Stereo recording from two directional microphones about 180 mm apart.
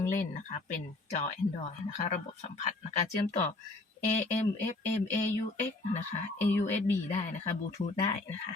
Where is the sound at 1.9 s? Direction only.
40° left (ahead or behind).